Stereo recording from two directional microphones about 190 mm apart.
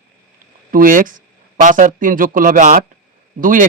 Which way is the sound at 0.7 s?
45° right (ahead or behind).